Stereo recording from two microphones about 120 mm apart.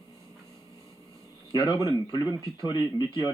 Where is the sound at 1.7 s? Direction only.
30° left (ahead or behind).